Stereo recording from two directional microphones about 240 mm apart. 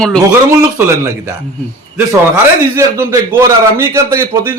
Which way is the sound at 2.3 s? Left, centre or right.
Centre.